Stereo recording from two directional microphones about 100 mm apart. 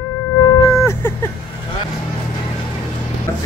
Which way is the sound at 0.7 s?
30° left (ahead or behind).